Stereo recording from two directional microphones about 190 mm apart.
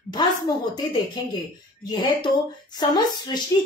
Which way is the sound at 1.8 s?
25° left (ahead or behind).